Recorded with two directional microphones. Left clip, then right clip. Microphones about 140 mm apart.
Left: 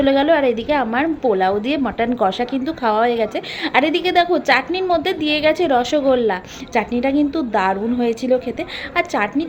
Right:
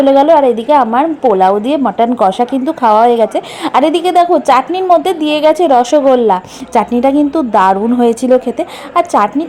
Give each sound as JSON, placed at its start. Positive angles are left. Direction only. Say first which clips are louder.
{"t": 0.0, "sound": "a woman's voice", "louder": "right 8 dB", "side_deg": -30}